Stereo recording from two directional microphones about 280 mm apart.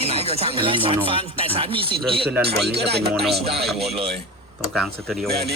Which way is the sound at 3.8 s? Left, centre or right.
Right.